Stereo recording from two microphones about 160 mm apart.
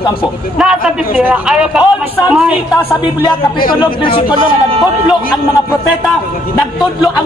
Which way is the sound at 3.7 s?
30° left (ahead or behind).